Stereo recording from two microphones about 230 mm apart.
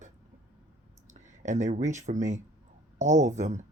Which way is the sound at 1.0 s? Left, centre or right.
Right.